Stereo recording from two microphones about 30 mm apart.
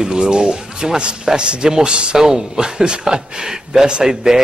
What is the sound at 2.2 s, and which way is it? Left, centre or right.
Speech, right.